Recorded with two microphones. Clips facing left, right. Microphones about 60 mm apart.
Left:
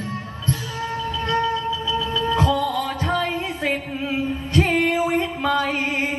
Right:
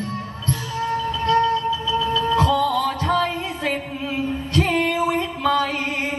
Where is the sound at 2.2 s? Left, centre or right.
Left.